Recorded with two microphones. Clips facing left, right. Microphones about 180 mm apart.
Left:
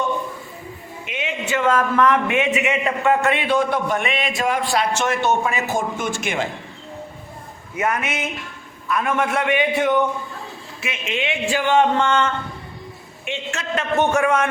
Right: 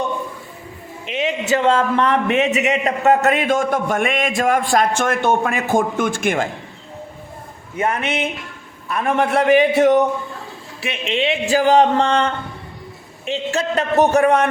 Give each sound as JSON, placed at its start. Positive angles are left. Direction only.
{"t": 1.1, "sound": "a man's voice", "side_deg": -35}
{"t": 7.8, "sound": "speech", "side_deg": -30}